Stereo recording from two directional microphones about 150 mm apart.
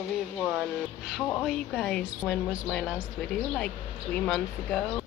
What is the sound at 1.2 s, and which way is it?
A woman's voice, 10° left (ahead or behind).